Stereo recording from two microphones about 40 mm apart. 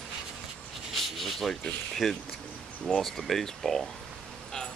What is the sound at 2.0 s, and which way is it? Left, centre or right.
Speech, centre.